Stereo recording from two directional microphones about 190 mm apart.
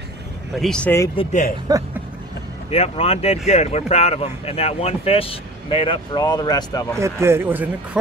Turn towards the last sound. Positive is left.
turn(degrees=-10)  # may be behind; listen again after turning